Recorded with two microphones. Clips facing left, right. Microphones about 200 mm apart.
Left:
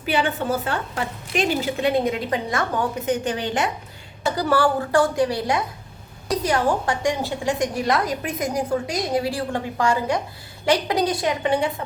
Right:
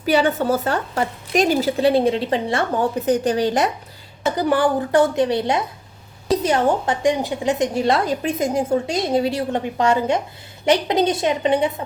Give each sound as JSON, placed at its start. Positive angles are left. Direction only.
{"t": 0.0, "sound": "a woman's voice", "side_deg": -40}
{"t": 4.2, "sound": "a woman's voice", "side_deg": -20}